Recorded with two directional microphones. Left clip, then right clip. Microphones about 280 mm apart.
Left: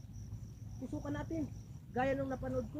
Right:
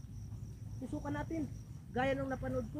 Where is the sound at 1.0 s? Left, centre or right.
Centre.